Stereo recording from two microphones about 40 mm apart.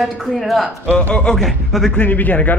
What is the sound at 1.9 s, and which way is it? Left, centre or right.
Speech, left.